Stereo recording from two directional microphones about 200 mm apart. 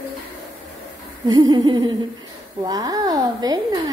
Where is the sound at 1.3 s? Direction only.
20° right (ahead or behind).